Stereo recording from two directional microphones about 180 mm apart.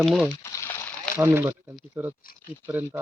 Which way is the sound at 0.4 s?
15° left (ahead or behind).